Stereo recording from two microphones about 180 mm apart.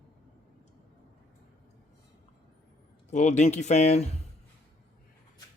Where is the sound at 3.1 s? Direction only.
40° left (ahead or behind).